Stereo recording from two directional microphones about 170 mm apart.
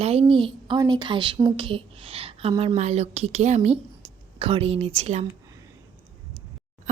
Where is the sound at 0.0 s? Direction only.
35° right (ahead or behind).